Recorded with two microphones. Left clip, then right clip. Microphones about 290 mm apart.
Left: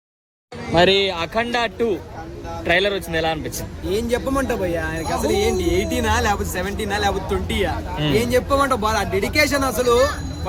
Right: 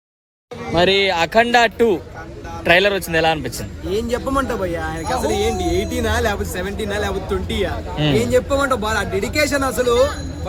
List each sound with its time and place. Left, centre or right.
0.7 s speech: centre
1.0 s speech: right
3.8 s speech: centre
5.0 s speech: right
5.3 s speech: centre